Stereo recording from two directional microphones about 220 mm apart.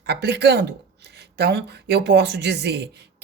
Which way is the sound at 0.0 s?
50° right (ahead or behind).